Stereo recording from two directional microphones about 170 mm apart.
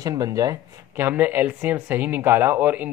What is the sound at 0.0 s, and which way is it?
Speech, 20° right (ahead or behind).